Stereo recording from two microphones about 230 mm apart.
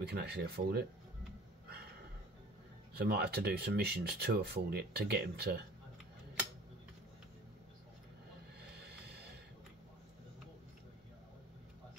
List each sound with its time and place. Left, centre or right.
0.0 s speech: right
3.0 s speech: right
9.0 s a sound: right